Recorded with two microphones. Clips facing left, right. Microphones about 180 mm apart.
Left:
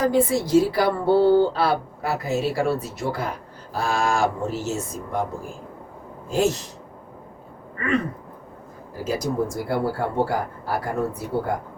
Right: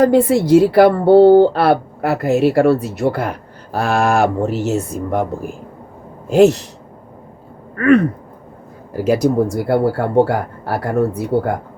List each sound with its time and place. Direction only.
0.0 s a woman's voice: 65° right (ahead or behind)
6.3 s a woman's voice: 65° right (ahead or behind)
7.8 s speech: 65° right (ahead or behind)